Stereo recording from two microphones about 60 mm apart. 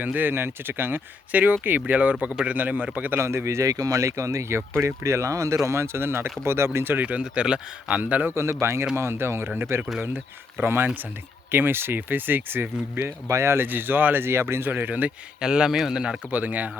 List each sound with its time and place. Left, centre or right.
0.0 s speech: right
3.2 s speech: right
3.7 s speech: right
5.6 s speech: right
7.2 s speech: centre
8.4 s speech: right
13.2 s speech: right
15.4 s a man's voice: centre
16.3 s speech: right